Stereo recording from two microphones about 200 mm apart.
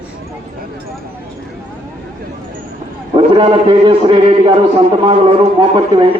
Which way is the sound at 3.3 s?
25° right (ahead or behind).